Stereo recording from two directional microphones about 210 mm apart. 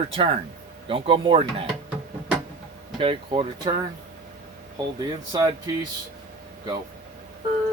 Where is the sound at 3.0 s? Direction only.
25° right (ahead or behind).